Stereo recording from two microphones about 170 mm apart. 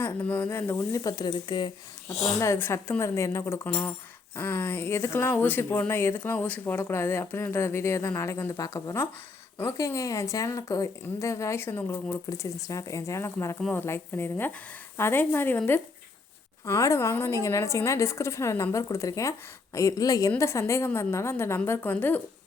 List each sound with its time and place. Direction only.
0.2 s speech: 10° left (ahead or behind); by 1.7 s 25° left (ahead or behind)
2.0 s speech: 15° left (ahead or behind)